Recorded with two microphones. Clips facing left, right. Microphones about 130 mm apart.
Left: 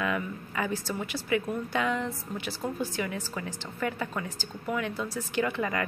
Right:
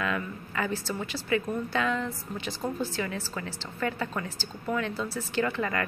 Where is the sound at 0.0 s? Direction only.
15° left (ahead or behind).